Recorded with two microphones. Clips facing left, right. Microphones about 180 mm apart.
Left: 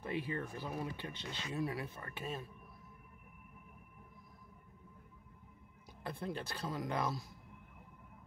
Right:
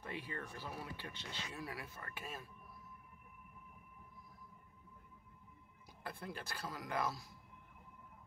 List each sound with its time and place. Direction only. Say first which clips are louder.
0.3 s speech: left 6 dB; 15° left (ahead or behind)
6.0 s speech: left 5 dB; 25° left (ahead or behind)